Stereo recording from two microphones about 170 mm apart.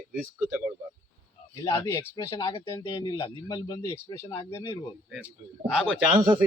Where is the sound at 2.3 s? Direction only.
30° left (ahead or behind).